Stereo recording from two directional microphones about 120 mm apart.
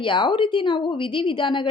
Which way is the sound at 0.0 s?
40° left (ahead or behind).